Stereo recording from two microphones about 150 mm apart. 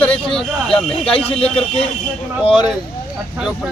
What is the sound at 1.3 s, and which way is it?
Speech, 40° left (ahead or behind).